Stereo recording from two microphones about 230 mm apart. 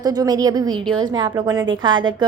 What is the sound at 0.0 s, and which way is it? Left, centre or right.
A woman's voice, centre.